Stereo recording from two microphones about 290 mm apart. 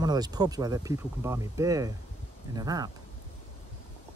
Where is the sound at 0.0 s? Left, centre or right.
Centre.